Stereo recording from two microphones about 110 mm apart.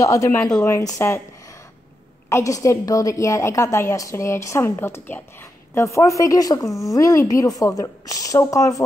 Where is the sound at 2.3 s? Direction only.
30° left (ahead or behind).